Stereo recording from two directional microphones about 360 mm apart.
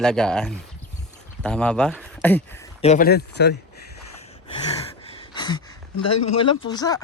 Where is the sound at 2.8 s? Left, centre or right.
Left.